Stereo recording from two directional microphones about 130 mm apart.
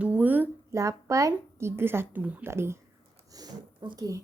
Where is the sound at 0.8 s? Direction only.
25° right (ahead or behind).